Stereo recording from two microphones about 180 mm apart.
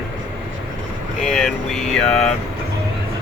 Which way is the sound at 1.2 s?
Centre (ahead or behind).